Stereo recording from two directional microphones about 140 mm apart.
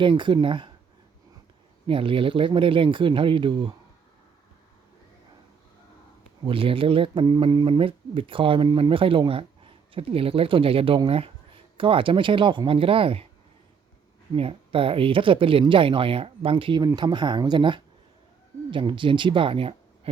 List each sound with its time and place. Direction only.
0.0 s speech: 35° right (ahead or behind)
1.9 s speech: 40° right (ahead or behind)
6.4 s speech: 40° right (ahead or behind)
14.3 s speech: 40° right (ahead or behind)